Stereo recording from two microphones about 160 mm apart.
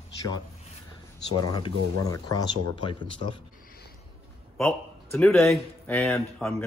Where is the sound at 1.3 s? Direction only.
30° left (ahead or behind).